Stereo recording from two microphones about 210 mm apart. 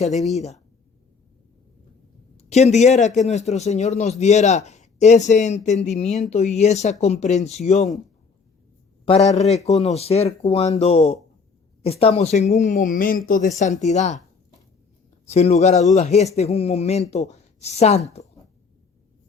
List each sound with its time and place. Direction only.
2.4 s speech: 30° left (ahead or behind)
9.0 s speech: 30° left (ahead or behind)
15.3 s speech: 30° left (ahead or behind)